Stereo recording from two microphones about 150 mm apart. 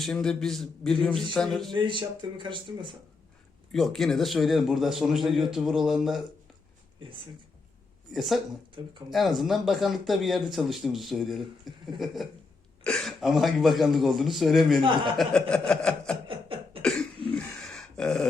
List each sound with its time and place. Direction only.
0.0 s speech: 5° left (ahead or behind)
1.7 s speech: 35° right (ahead or behind)
3.7 s speech: centre (ahead or behind)
8.1 s speech: centre (ahead or behind)
14.8 s speech: 35° right (ahead or behind)
15.2 s speech: 5° left (ahead or behind)
16.2 s a sound: 35° right (ahead or behind)
16.8 s cough: 5° left (ahead or behind)
17.3 s a sound: 5° left (ahead or behind)